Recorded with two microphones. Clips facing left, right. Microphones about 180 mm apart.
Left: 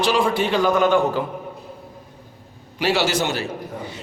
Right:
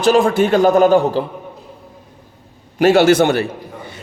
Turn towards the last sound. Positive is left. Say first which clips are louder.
# right 10 dB
turn(degrees=-60)  # may be behind; listen again after turning